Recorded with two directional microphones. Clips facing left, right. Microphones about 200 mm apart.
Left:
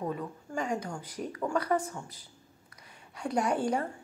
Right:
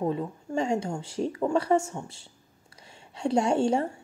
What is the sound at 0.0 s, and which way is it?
A woman's voice, 25° right (ahead or behind).